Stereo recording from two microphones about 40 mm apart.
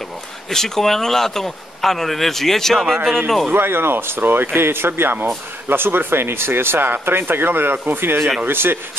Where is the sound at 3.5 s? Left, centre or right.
Right.